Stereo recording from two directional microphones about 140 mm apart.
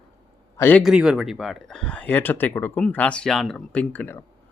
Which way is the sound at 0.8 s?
5° right (ahead or behind).